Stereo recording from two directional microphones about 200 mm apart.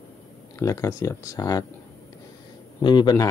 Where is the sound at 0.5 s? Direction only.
15° left (ahead or behind).